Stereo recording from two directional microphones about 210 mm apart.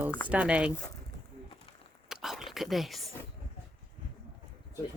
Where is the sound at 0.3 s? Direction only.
5° right (ahead or behind).